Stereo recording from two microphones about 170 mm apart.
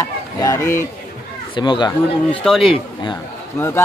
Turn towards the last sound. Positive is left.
turn(degrees=15)  # may be behind; listen again after turning